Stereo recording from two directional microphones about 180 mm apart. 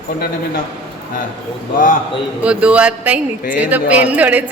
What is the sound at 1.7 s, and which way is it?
Speech, 45° left (ahead or behind).